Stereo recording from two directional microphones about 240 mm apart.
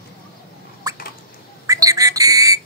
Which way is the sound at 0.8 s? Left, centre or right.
Centre.